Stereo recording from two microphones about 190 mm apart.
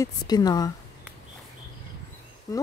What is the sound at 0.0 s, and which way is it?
Speech, 20° left (ahead or behind).